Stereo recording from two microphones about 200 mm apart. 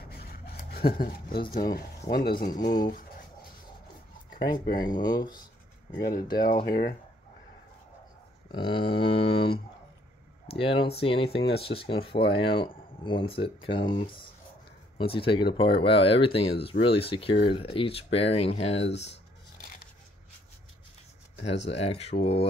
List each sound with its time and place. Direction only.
0.1 s a sound: 50° left (ahead or behind)
1.5 s speech: 50° left (ahead or behind)
4.3 s speech: 45° left (ahead or behind)
4.8 s speech: 20° left (ahead or behind)
6.6 s speech: 50° left (ahead or behind)
8.5 s speech: 25° left (ahead or behind)
10.6 s speech: 30° left (ahead or behind)
21.6 s speech: 30° left (ahead or behind)